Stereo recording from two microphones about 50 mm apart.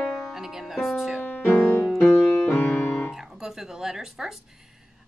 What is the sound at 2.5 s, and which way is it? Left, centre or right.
Piano, left.